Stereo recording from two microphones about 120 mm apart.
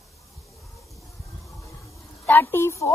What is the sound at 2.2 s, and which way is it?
Speech, 20° left (ahead or behind).